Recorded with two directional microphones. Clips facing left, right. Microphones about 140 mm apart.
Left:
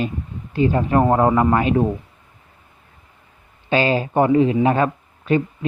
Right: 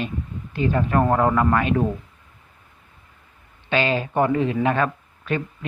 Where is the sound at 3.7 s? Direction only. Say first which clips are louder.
Left 3 dB; 35° left (ahead or behind).